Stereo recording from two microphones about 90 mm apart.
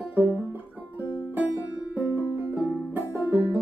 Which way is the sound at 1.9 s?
20° right (ahead or behind).